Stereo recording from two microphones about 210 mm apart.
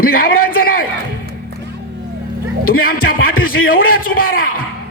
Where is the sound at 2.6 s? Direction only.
45° left (ahead or behind).